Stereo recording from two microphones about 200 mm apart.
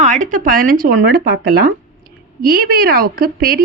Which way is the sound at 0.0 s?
40° right (ahead or behind).